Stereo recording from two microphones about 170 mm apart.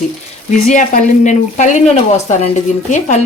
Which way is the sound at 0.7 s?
50° left (ahead or behind).